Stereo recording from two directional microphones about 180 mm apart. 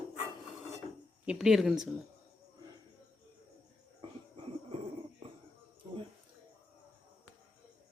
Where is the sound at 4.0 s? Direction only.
30° right (ahead or behind).